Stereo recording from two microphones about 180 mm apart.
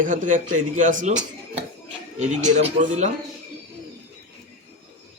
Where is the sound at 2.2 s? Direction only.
40° right (ahead or behind).